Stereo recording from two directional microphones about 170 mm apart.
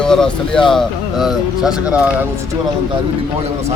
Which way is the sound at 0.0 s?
5° left (ahead or behind).